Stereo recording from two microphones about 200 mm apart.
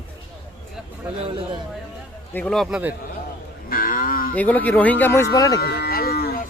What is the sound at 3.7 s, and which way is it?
Moo, 45° left (ahead or behind).